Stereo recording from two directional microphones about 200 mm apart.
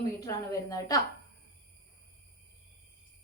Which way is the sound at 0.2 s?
15° left (ahead or behind).